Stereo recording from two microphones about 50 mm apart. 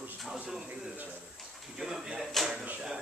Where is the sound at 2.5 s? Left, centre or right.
Right.